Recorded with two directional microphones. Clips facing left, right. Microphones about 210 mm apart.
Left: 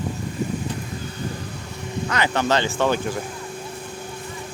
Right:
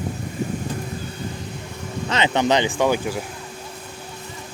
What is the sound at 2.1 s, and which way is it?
Speech, 20° right (ahead or behind).